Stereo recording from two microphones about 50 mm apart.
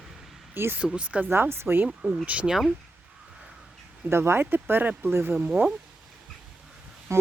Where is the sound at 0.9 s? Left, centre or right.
Right.